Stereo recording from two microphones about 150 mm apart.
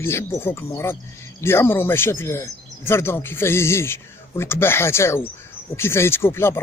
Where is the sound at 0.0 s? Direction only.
15° left (ahead or behind).